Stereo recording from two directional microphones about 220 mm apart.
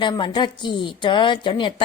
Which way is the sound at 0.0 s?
20° left (ahead or behind).